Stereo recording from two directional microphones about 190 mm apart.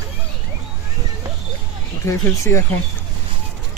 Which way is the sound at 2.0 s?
15° left (ahead or behind).